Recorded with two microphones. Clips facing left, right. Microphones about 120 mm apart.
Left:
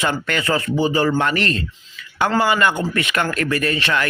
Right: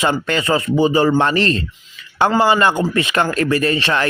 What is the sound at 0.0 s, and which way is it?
A man's voice, 25° right (ahead or behind).